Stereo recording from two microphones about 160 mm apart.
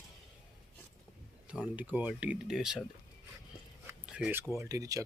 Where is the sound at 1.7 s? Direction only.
10° right (ahead or behind).